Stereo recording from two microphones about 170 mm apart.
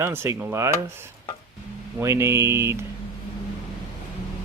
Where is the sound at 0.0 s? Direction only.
15° right (ahead or behind).